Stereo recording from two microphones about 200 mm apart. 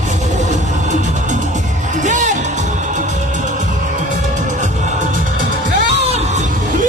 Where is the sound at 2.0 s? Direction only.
40° right (ahead or behind).